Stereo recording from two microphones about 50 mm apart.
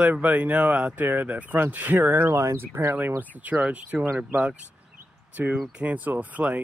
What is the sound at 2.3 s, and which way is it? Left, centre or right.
Speech, right.